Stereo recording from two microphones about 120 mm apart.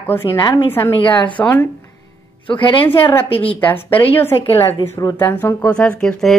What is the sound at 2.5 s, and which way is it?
Speech, 45° left (ahead or behind).